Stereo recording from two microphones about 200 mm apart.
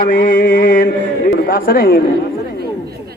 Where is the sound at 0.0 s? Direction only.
40° left (ahead or behind).